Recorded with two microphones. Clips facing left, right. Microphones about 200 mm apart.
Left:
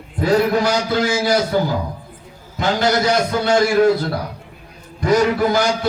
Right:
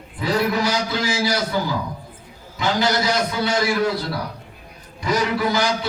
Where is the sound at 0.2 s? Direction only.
50° left (ahead or behind).